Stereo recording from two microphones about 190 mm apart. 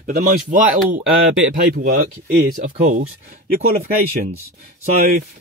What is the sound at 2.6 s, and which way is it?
Speech, 40° right (ahead or behind).